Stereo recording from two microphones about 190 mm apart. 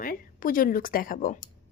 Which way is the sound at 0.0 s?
50° left (ahead or behind).